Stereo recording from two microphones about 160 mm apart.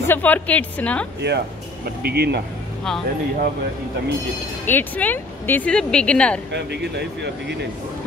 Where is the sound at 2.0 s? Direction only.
90° right.